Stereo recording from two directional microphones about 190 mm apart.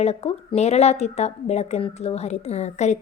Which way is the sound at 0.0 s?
35° left (ahead or behind).